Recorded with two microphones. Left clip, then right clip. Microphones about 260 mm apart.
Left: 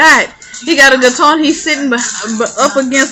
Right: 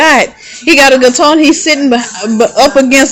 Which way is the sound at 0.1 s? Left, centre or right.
Right.